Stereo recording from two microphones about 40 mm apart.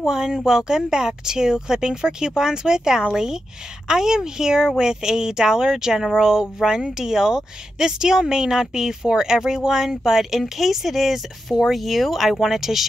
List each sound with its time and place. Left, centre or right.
0.0 s speech: centre